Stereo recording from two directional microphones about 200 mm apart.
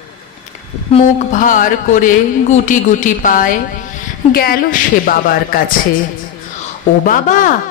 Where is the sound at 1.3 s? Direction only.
40° left (ahead or behind).